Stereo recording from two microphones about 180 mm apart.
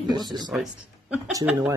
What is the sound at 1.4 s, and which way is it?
Speech, 5° right (ahead or behind).